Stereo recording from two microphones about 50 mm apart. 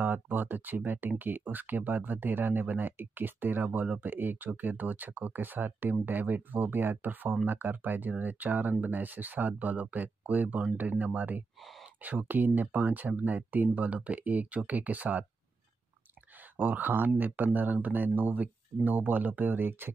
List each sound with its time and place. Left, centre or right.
0.0 s speech: right
16.5 s speech: right